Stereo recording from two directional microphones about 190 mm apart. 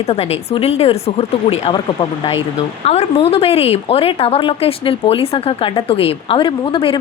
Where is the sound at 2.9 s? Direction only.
30° left (ahead or behind).